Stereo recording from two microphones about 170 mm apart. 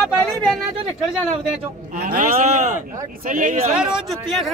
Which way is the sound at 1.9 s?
60° right (ahead or behind).